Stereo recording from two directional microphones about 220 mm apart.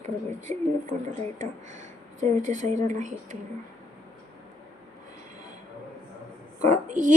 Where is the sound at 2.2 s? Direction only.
35° right (ahead or behind).